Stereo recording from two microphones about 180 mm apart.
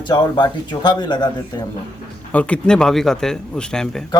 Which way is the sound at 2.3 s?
5° left (ahead or behind).